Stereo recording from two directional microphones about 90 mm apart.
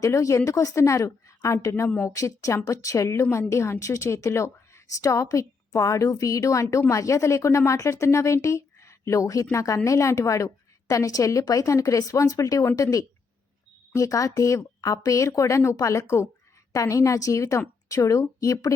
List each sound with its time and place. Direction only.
0.0 s a woman's voice: 35° left (ahead or behind)